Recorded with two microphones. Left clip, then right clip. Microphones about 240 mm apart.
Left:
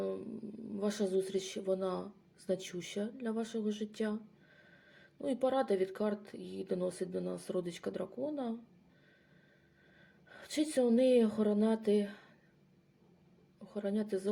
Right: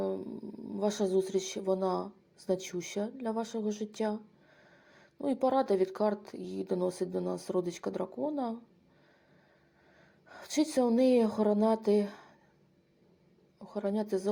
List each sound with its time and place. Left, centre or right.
0.7 s speech: centre
10.2 s speech: centre
13.6 s speech: centre